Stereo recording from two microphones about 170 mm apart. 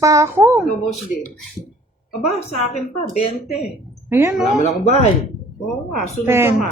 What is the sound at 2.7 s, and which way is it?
Speech, 40° left (ahead or behind).